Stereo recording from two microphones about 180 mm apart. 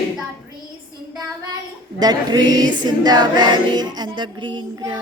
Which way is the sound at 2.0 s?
20° right (ahead or behind).